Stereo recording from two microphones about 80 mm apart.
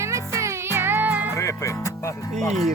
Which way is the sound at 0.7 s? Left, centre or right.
Right.